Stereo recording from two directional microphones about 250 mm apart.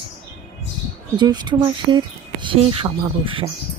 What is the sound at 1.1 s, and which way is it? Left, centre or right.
Speech, centre.